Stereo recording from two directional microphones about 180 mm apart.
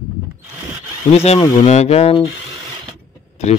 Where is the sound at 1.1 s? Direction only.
35° left (ahead or behind).